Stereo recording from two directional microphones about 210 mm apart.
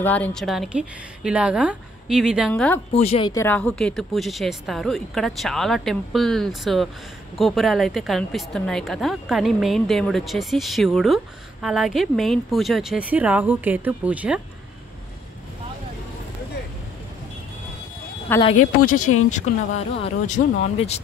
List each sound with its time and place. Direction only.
0.0 s speech: 5° left (ahead or behind)
2.9 s speech: 30° left (ahead or behind); by 14.4 s 5° right (ahead or behind)
18.3 s speech: 10° left (ahead or behind)
19.1 s speech: 90° left
20.0 s speech: 35° left (ahead or behind)